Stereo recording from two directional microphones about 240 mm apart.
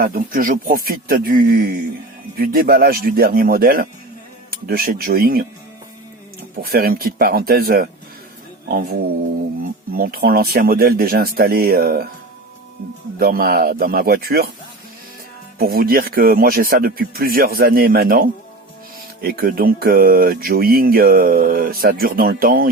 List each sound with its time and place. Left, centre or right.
0.0 s speech: right
6.6 s speech: right
9.9 s speech: right
13.1 s speech: right
15.5 s speech: right